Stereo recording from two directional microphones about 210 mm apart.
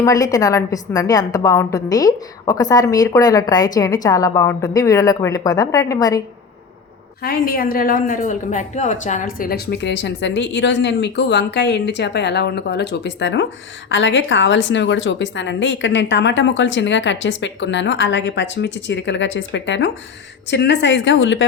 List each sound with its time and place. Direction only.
0.0 s a woman's voice: 15° left (ahead or behind)
7.2 s a woman's voice: 45° left (ahead or behind); by 21.4 s 60° left (ahead or behind)